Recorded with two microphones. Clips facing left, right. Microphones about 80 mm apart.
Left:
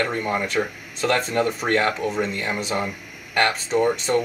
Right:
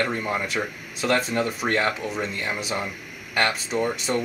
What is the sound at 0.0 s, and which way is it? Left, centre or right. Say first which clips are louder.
Speech: left 2 dB; centre.